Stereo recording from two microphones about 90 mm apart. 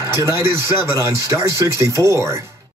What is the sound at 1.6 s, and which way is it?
Speech, 30° right (ahead or behind).